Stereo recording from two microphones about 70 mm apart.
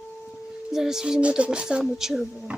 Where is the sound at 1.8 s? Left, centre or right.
Centre.